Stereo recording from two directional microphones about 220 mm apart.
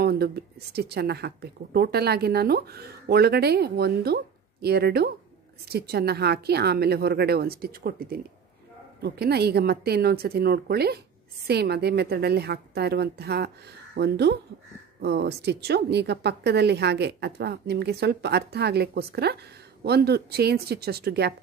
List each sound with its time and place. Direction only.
0.0 s speech: 45° right (ahead or behind)